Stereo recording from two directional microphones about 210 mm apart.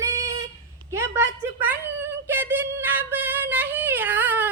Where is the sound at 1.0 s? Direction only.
10° right (ahead or behind).